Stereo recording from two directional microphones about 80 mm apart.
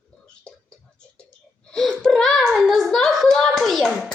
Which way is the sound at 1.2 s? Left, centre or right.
Centre.